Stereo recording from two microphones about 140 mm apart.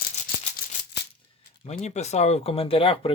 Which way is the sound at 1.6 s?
50° left (ahead or behind).